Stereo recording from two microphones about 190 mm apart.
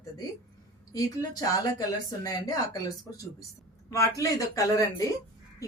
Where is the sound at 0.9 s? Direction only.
20° left (ahead or behind).